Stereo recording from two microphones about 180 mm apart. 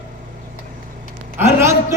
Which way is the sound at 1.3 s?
15° right (ahead or behind).